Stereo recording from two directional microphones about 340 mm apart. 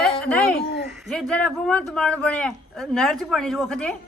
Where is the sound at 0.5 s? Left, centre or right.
Left.